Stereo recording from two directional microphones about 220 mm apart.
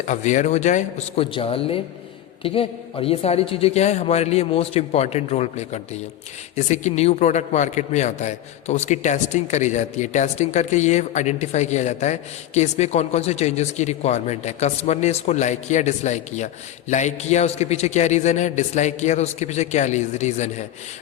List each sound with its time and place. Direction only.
0.0 s a man's voice: 35° left (ahead or behind)